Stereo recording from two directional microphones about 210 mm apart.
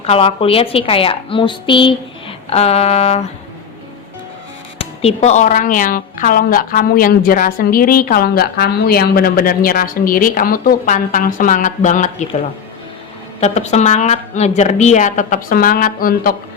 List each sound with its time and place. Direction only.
0.0 s a woman's voice: 30° left (ahead or behind)
4.8 s speech: 30° left (ahead or behind)
13.4 s a woman's voice: 30° left (ahead or behind)